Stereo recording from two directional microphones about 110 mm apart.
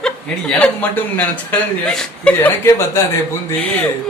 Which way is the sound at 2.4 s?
25° left (ahead or behind).